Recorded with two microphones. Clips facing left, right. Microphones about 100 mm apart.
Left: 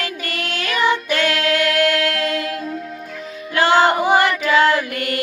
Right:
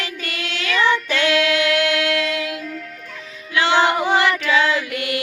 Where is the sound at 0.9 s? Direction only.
45° left (ahead or behind).